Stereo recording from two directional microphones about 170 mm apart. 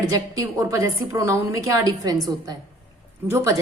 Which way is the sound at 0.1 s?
20° right (ahead or behind).